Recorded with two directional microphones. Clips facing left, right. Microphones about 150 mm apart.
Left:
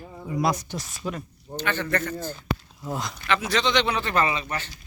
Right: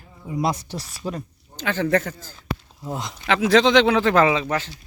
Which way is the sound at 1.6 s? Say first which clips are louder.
Right 5 dB; 90° right.